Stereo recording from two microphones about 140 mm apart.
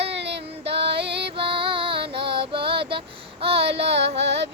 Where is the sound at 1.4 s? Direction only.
40° right (ahead or behind).